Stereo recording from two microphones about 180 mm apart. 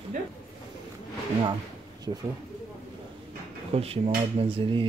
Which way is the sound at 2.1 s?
25° right (ahead or behind).